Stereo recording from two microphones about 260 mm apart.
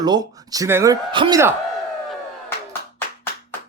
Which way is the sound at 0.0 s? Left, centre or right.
Centre.